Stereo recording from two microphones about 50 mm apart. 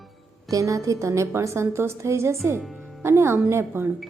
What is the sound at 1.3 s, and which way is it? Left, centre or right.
A woman's voice, right.